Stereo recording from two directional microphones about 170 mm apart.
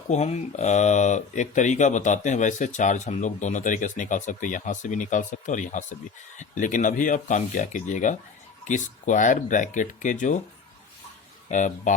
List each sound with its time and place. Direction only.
0.1 s speech: 40° left (ahead or behind)
11.5 s speech: 45° left (ahead or behind)